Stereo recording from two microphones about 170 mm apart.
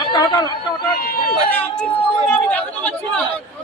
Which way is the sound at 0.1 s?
25° left (ahead or behind).